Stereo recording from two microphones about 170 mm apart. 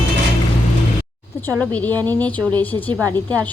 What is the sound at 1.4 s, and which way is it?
A woman's voice, 10° left (ahead or behind).